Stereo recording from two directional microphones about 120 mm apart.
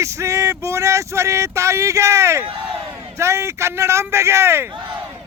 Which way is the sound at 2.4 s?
45° right (ahead or behind).